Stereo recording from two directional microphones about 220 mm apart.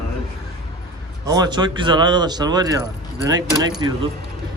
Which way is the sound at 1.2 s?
15° right (ahead or behind).